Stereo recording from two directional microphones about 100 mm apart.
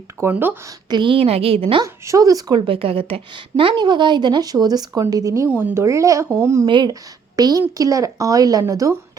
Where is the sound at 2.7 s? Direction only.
70° right (ahead or behind); by 5.5 s 30° right (ahead or behind).